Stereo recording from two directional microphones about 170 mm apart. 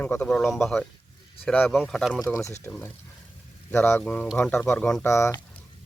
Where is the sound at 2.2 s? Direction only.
15° left (ahead or behind).